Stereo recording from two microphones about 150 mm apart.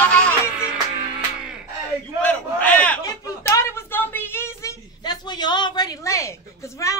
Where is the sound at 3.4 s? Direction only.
15° left (ahead or behind).